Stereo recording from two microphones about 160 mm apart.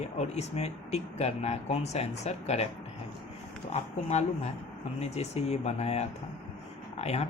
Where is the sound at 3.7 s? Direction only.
45° left (ahead or behind).